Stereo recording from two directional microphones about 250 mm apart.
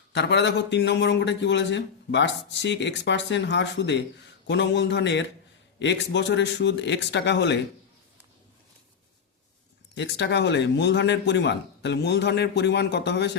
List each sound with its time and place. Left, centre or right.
0.1 s a man's voice: left
9.9 s a man's voice: left